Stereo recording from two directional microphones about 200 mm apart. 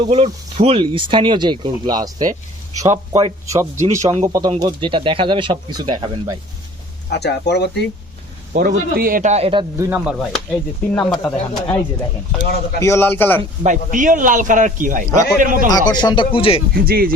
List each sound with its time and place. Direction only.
0.0 s speech: 30° right (ahead or behind)
3.8 s speech: 35° right (ahead or behind)
4.3 s speech: 20° right (ahead or behind)
7.1 s speech: 55° left (ahead or behind)
8.5 s speech: 45° right (ahead or behind); by 9.6 s 30° right (ahead or behind)
9.7 s speech: 15° right (ahead or behind)
10.0 s speech: centre (ahead or behind)
10.9 s speech: 10° left (ahead or behind)
12.4 s speech: 50° left (ahead or behind)
12.8 s speech: 10° left (ahead or behind)
13.4 s speech: 35° right (ahead or behind)
15.9 s speech: 20° left (ahead or behind)
16.8 s speech: 50° right (ahead or behind)